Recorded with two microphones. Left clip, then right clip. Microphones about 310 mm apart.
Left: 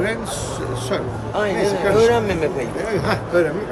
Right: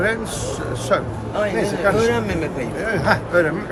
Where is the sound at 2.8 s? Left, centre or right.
Centre.